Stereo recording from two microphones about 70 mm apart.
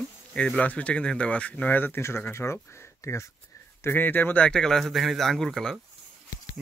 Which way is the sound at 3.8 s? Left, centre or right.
Left.